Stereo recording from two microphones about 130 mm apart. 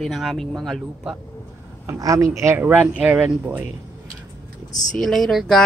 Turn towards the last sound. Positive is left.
turn(degrees=0)  # may be behind; listen again after turning